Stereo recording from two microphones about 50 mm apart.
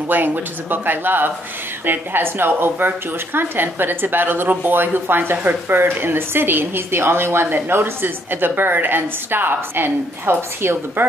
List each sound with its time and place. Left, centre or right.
0.1 s a woman's voice: right